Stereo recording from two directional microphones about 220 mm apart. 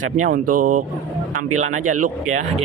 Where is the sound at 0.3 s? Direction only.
40° right (ahead or behind).